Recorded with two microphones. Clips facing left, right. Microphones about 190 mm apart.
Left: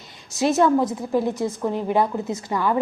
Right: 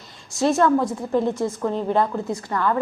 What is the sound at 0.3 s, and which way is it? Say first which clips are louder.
A woman's voice: even; 15° left (ahead or behind).